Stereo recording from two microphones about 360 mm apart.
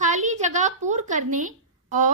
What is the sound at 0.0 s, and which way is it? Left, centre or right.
Speech, centre.